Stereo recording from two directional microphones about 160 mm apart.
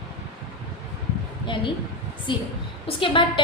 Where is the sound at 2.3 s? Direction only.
30° left (ahead or behind).